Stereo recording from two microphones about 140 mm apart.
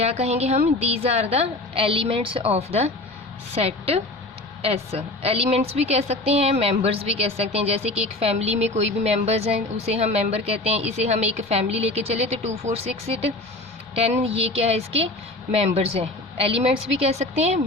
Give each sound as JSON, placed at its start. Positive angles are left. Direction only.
{"t": 0.0, "sound": "a woman's voice", "side_deg": -50}